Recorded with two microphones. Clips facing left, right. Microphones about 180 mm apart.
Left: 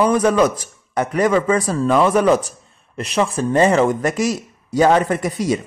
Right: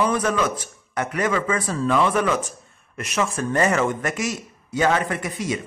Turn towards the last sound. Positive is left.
turn(degrees=40)  # may be behind; listen again after turning